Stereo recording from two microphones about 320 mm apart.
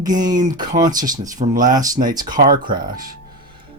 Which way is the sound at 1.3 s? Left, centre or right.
Right.